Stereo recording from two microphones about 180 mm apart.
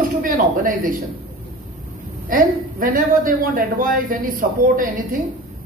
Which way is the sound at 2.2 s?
50° right (ahead or behind).